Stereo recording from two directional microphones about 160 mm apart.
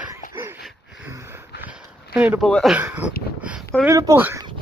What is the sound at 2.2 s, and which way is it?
Speech, 10° right (ahead or behind).